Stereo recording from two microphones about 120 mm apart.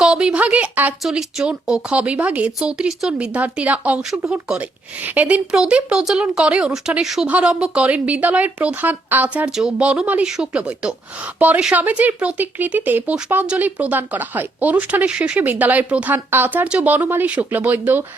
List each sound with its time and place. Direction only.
0.0 s speech: 5° right (ahead or behind)
9.5 s speech: 5° right (ahead or behind)